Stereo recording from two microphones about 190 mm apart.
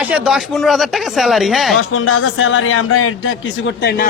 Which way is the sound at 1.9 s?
90° left.